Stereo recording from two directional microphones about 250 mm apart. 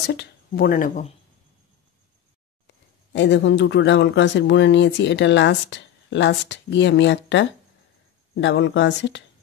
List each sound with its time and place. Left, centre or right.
0.0 s speech: left
2.6 s speech: left